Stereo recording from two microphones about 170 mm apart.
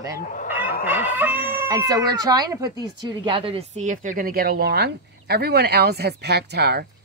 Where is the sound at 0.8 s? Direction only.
10° right (ahead or behind).